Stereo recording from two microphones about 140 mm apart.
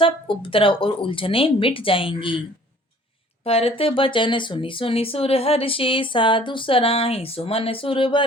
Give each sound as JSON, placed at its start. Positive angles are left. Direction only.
{"t": 0.0, "sound": "speech", "side_deg": 40}
{"t": 3.4, "sound": "speech", "side_deg": 45}